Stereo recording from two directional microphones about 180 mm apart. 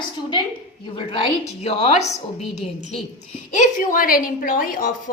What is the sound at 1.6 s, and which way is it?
Speech, 35° left (ahead or behind).